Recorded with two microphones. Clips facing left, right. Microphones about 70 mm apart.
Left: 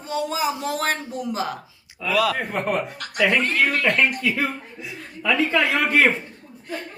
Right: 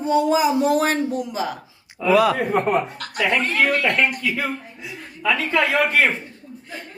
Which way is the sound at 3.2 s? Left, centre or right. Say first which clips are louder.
Right 1 dB; centre.